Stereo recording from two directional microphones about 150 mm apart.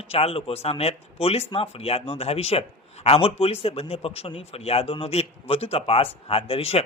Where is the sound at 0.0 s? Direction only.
40° left (ahead or behind).